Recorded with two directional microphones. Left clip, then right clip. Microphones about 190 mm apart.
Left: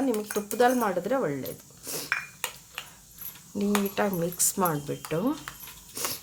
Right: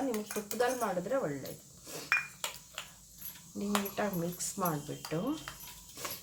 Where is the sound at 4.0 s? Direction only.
65° left (ahead or behind).